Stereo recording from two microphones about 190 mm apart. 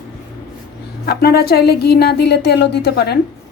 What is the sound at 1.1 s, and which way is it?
Speech, 55° left (ahead or behind).